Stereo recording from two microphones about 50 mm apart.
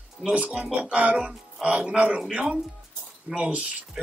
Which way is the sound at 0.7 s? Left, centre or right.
Right.